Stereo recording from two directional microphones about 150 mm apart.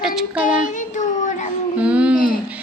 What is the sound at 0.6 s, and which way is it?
Child singing, 60° left (ahead or behind).